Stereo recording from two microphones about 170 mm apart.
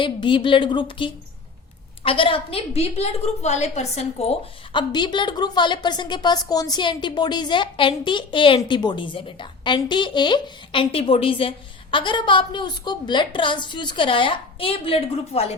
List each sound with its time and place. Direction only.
0.0 s a woman's voice: 30° left (ahead or behind)